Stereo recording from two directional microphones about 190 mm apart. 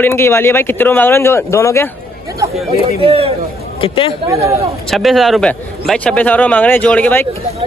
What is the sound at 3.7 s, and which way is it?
Speech, 25° left (ahead or behind).